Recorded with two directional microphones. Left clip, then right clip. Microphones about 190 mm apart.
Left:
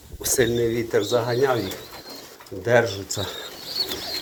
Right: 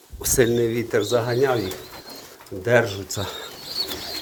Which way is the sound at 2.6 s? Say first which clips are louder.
Even; 30° right (ahead or behind).